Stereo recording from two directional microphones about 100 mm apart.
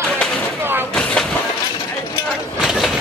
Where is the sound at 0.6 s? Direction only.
20° right (ahead or behind).